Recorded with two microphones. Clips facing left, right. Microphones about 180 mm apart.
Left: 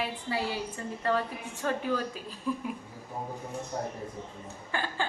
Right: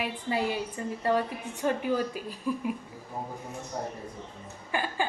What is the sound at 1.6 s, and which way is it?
Speech, 15° right (ahead or behind).